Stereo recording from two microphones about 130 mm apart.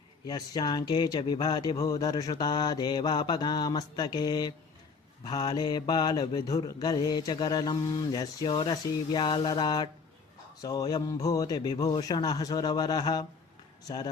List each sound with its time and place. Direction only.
0.3 s mantra: 30° left (ahead or behind)
10.6 s a man's voice: 30° left (ahead or behind)
13.8 s mantra: 30° left (ahead or behind)